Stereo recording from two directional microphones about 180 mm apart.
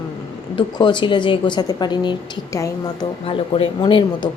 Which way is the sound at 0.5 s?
25° left (ahead or behind).